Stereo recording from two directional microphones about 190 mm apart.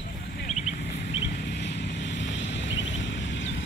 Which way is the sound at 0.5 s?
40° left (ahead or behind).